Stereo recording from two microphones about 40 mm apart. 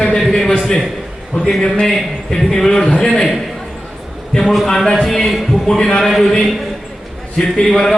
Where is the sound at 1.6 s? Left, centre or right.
Centre.